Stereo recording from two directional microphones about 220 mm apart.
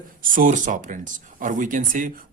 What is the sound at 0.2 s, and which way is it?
Speech, 35° right (ahead or behind).